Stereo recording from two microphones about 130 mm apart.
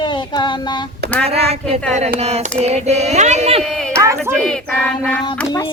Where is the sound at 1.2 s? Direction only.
50° right (ahead or behind).